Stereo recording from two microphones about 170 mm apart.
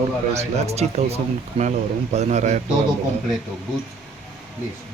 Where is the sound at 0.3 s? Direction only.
40° right (ahead or behind).